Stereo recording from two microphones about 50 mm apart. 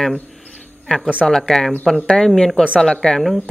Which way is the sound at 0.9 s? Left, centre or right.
Left.